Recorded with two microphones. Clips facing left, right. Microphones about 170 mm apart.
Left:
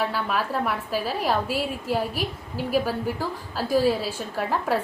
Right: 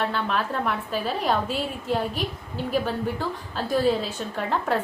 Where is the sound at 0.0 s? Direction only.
5° left (ahead or behind).